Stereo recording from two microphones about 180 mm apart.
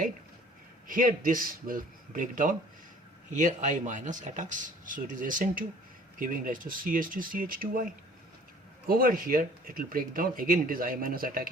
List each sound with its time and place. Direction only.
0.9 s speech: 50° right (ahead or behind)
8.9 s speech: 55° right (ahead or behind)